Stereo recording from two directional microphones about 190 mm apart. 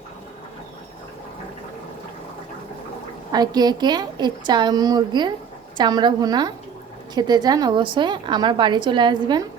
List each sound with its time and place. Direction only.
3.3 s a woman's voice: 20° right (ahead or behind)